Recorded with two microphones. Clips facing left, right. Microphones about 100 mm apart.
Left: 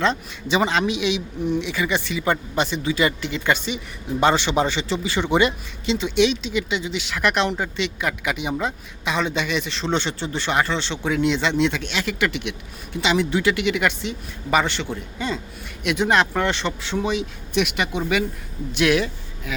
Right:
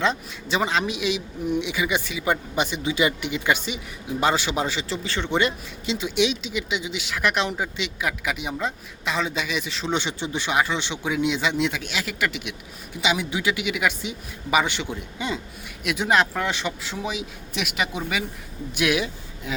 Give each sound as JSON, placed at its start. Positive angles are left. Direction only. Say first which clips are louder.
{"t": 0.0, "sound": "speech", "louder": "left 2 dB", "side_deg": -5}
{"t": 5.0, "sound": "speech", "louder": "left 4 dB", "side_deg": 10}
{"t": 15.8, "sound": "speech", "louder": "left 2 dB", "side_deg": -5}
{"t": 19.5, "sound": "speech", "louder": "even", "side_deg": -25}